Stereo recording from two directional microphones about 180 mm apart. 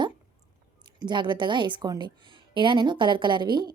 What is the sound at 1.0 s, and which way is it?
A woman's voice, 25° right (ahead or behind).